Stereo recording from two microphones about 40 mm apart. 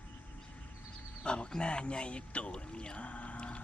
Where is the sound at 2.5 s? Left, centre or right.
Left.